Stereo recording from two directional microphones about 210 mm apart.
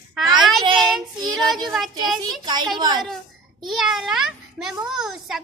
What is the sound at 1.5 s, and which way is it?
Speech, centre (ahead or behind).